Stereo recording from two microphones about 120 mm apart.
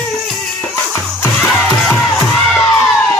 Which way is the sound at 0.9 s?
20° left (ahead or behind).